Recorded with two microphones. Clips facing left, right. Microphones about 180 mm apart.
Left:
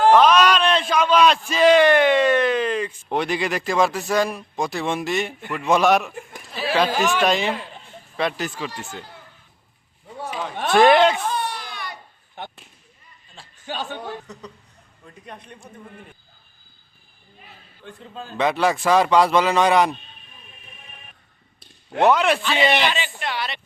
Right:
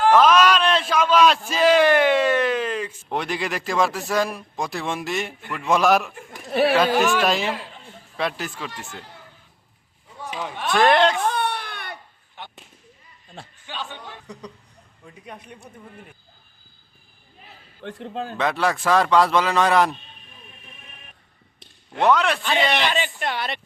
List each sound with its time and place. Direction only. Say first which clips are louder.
0.1 s a man's voice: right 1 dB; centre (ahead or behind)
6.5 s a sound: right 8 dB; 60° right (ahead or behind)
6.7 s a man's voice: right 1 dB; centre (ahead or behind)
10.8 s a man's voice: left 3 dB; 5° left (ahead or behind)
11.3 s baby cry: right 2 dB; 65° right (ahead or behind)
13.7 s speech: left 6 dB; 45° left (ahead or behind)
14.3 s a man's voice: right 1 dB; 10° right (ahead or behind)
17.8 s a man's voice: right 7 dB; 70° right (ahead or behind)
18.3 s a man's voice: left 3 dB; centre (ahead or behind)
21.9 s a man's voice: left 2 dB; 5° left (ahead or behind)
22.9 s speech: right 2 dB; 50° right (ahead or behind)